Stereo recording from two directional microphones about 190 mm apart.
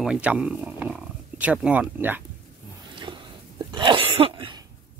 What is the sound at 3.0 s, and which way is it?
Sneeze, 25° right (ahead or behind).